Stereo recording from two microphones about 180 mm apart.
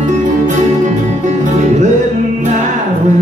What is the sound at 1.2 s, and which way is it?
Music, 40° right (ahead or behind).